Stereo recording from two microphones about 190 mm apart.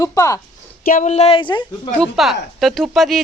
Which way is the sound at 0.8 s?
45° left (ahead or behind).